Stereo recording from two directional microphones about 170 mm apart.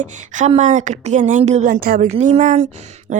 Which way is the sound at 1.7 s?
60° right (ahead or behind).